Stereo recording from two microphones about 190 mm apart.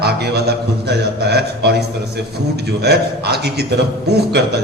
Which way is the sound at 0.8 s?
60° right (ahead or behind).